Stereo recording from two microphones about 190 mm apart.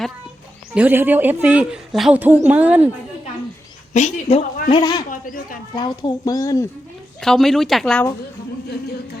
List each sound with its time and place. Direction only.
0.7 s a woman's voice: 10° right (ahead or behind)
3.9 s a woman's voice: 35° left (ahead or behind)
4.7 s a man's voice: 20° left (ahead or behind)
5.0 s a sound: 45° left (ahead or behind)
5.7 s a child's voice: 25° left (ahead or behind)
7.2 s speech: centre (ahead or behind)